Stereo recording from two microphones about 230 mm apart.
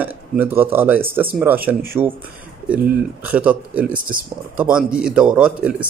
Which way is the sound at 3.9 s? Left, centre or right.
Right.